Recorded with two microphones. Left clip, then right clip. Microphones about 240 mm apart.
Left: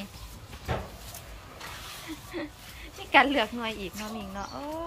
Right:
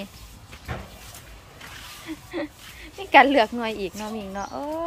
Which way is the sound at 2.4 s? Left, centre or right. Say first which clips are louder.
Right 5 dB; centre.